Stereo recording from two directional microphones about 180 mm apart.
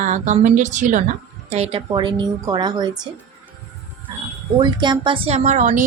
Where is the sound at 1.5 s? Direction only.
35° right (ahead or behind).